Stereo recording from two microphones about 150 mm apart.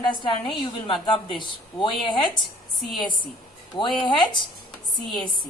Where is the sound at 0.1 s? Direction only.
30° left (ahead or behind).